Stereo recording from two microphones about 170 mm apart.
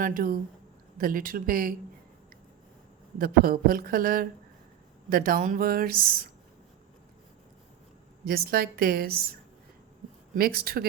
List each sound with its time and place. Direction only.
0.0 s speech: 55° right (ahead or behind)
3.2 s speech: 60° right (ahead or behind)
8.3 s speech: 65° right (ahead or behind)
10.3 s speech: 60° right (ahead or behind)